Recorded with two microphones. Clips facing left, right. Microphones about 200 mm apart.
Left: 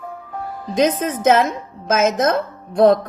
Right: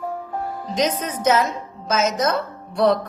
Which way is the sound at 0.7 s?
50° left (ahead or behind).